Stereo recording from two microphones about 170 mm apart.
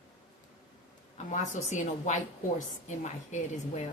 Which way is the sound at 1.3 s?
45° left (ahead or behind).